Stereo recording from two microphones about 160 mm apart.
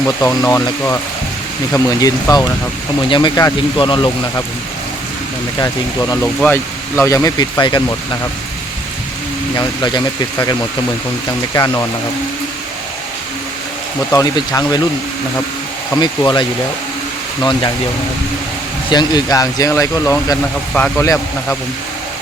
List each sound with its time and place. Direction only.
0.2 s speech: 20° left (ahead or behind)
5.5 s speech: 20° left (ahead or behind)
9.6 s speech: 25° left (ahead or behind)
14.1 s speech: 20° left (ahead or behind)
16.0 s speech: 25° left (ahead or behind)
18.9 s speech: 25° left (ahead or behind)
20.7 s speech: 10° left (ahead or behind)